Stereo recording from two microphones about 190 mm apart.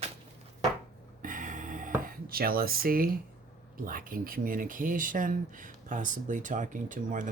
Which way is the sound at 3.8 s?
45° right (ahead or behind).